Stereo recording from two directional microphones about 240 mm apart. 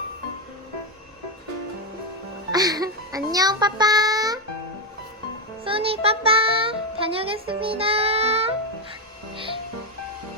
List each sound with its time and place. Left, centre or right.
2.5 s speech: centre
5.6 s music: right